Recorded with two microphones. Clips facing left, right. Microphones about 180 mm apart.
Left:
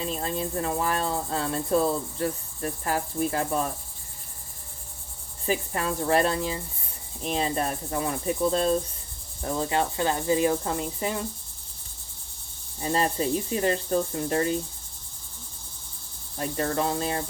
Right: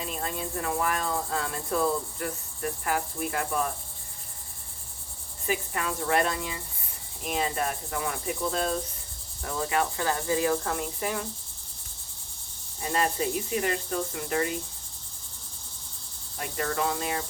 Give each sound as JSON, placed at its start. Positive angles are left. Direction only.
{"t": 0.0, "sound": "cricket", "side_deg": 30}
{"t": 5.5, "sound": "cricket", "side_deg": 35}
{"t": 9.4, "sound": "cricket", "side_deg": 30}
{"t": 12.8, "sound": "cricket", "side_deg": 30}
{"t": 16.4, "sound": "cricket", "side_deg": 30}